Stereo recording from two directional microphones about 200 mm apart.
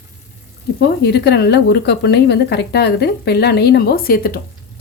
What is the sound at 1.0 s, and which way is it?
A woman's voice, 55° left (ahead or behind).